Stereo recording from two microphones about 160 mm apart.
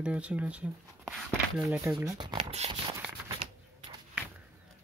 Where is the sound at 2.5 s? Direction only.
40° right (ahead or behind).